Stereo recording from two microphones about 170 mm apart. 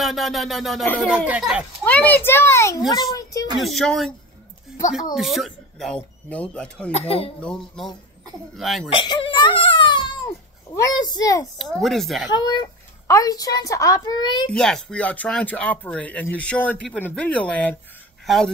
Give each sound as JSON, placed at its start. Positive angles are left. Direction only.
{"t": 0.0, "sound": "speech", "side_deg": 0}
{"t": 1.9, "sound": "a child's voice", "side_deg": 10}
{"t": 3.0, "sound": "a sound", "side_deg": 20}
{"t": 3.5, "sound": "speech", "side_deg": 0}
{"t": 5.1, "sound": "speech", "side_deg": 0}
{"t": 6.9, "sound": "speech", "side_deg": 35}
{"t": 7.3, "sound": "speech", "side_deg": 5}
{"t": 8.9, "sound": "crying", "side_deg": 30}
{"t": 10.8, "sound": "a woman's voice", "side_deg": 25}
{"t": 11.5, "sound": "speech", "side_deg": 0}
{"t": 12.3, "sound": "a woman's voice", "side_deg": 25}
{"t": 14.5, "sound": "speech", "side_deg": 5}